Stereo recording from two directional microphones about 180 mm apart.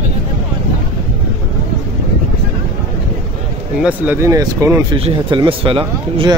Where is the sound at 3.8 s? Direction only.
10° right (ahead or behind).